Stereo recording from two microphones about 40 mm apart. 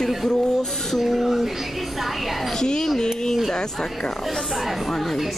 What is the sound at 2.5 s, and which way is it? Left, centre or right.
Speech, centre.